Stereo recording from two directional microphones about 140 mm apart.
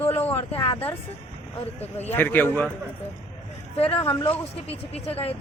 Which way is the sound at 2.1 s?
15° left (ahead or behind).